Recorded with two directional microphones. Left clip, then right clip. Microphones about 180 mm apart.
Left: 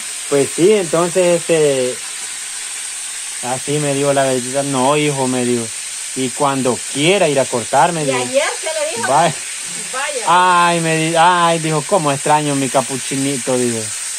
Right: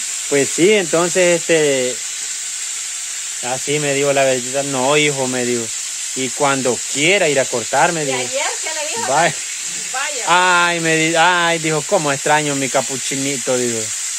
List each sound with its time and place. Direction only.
0.4 s speech: 35° right (ahead or behind)
3.4 s speech: 35° right (ahead or behind)
10.2 s speech: 25° right (ahead or behind)